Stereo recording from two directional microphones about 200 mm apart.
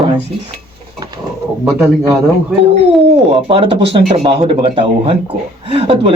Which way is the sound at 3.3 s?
30° right (ahead or behind).